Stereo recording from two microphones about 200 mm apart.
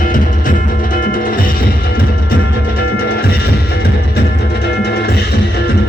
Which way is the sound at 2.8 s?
50° left (ahead or behind).